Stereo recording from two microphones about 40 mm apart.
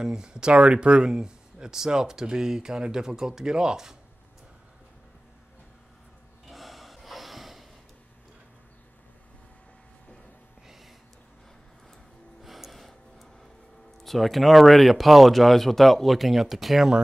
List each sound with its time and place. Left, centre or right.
0.0 s speech: centre
6.5 s snort: centre
12.4 s gasp: centre
14.0 s speech: centre